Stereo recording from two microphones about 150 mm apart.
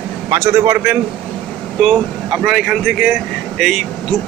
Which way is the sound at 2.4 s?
5° right (ahead or behind).